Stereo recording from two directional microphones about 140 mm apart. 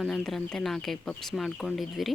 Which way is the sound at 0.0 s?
Centre (ahead or behind).